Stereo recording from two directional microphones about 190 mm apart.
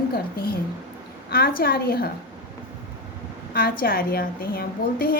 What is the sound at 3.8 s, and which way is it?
A woman's voice, 50° left (ahead or behind).